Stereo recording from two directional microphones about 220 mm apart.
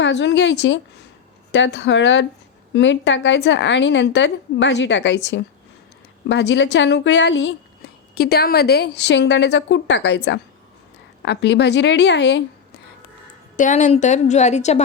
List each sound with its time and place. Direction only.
0.0 s a woman's voice: 55° left (ahead or behind)
13.6 s a woman's voice: 35° left (ahead or behind)